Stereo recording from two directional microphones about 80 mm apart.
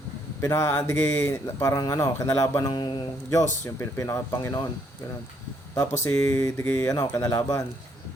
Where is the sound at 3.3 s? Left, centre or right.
Left.